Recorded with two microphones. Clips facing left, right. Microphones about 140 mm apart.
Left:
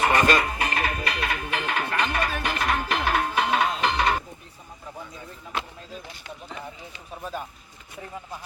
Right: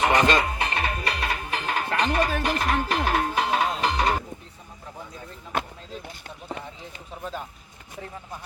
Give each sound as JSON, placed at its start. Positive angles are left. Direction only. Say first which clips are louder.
{"t": 0.0, "sound": "music", "louder": "even", "side_deg": -15}